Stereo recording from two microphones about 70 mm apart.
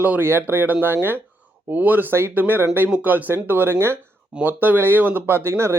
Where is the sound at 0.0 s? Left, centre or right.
Right.